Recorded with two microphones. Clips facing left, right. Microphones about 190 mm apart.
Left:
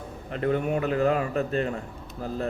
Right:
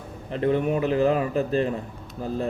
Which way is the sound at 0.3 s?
30° right (ahead or behind).